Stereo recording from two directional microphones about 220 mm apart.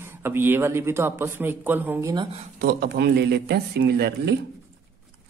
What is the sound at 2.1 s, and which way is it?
Speech, 20° right (ahead or behind).